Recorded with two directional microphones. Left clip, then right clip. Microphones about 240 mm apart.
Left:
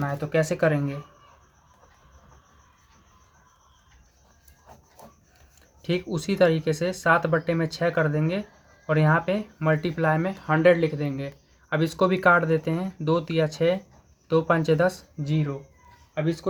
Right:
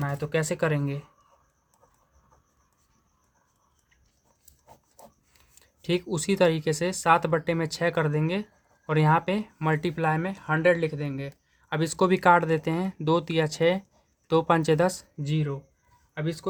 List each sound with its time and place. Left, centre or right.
0.0 s speech: right
5.8 s speech: right
16.1 s speech: right